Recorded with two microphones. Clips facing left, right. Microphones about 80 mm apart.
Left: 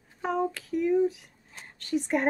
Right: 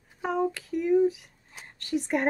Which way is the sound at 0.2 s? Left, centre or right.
Centre.